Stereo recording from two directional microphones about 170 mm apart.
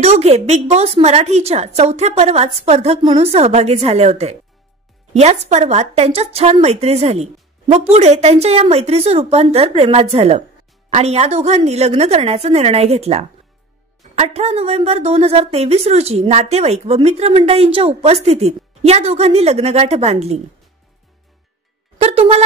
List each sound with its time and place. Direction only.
0.0 s a woman's voice: 40° right (ahead or behind)
21.9 s speech: 35° right (ahead or behind)